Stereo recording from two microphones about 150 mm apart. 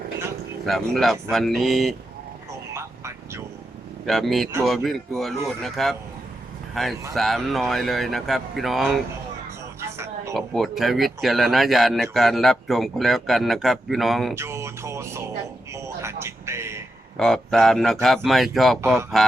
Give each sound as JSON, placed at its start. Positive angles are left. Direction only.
{"t": 0.6, "sound": "a man's voice", "side_deg": 0}
{"t": 2.7, "sound": "vehicle", "side_deg": -15}
{"t": 4.0, "sound": "a man's voice", "side_deg": 0}
{"t": 10.3, "sound": "a man's voice", "side_deg": 0}
{"t": 14.3, "sound": "music", "side_deg": -20}
{"t": 15.7, "sound": "a sound", "side_deg": -20}
{"t": 17.2, "sound": "a man's voice", "side_deg": 5}